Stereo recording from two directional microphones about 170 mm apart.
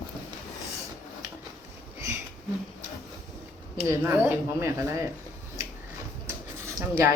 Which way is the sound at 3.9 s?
15° right (ahead or behind).